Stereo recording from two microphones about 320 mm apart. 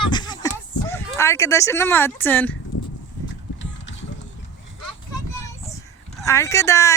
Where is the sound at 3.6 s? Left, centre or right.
Left.